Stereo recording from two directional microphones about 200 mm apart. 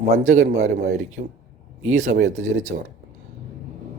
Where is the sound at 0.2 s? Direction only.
40° right (ahead or behind).